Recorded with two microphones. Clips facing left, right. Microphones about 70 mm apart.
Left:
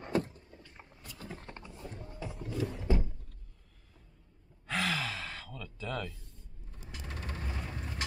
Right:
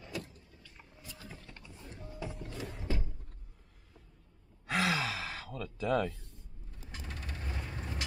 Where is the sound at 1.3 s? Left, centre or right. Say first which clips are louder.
Left 6 dB; left.